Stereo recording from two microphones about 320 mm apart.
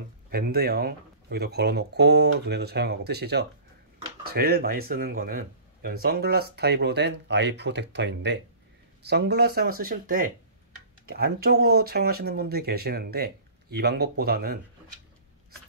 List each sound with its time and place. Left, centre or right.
0.3 s speech: right